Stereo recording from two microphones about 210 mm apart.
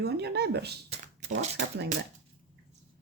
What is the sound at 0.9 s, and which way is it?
Shuffling cards, 35° right (ahead or behind).